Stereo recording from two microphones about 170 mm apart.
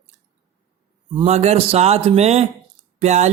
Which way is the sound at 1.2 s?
40° right (ahead or behind).